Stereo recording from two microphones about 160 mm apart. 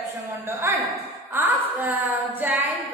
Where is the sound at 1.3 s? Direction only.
10° right (ahead or behind).